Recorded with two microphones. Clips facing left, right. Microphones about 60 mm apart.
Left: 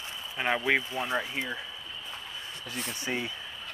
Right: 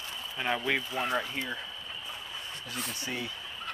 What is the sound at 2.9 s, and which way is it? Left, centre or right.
Speech, left.